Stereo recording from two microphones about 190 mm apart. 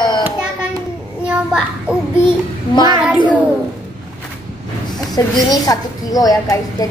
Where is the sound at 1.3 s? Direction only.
5° right (ahead or behind).